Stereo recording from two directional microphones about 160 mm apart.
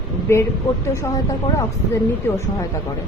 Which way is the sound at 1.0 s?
20° left (ahead or behind).